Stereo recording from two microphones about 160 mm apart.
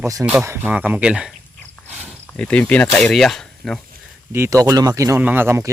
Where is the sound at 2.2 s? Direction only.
5° left (ahead or behind).